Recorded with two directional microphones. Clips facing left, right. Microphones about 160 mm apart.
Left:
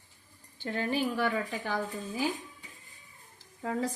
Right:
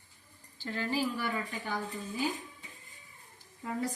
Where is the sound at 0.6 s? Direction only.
60° left (ahead or behind); by 1.7 s 75° left (ahead or behind).